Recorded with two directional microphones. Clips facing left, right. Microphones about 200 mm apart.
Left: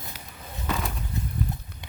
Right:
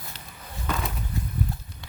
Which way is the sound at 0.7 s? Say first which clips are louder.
Even; centre (ahead or behind).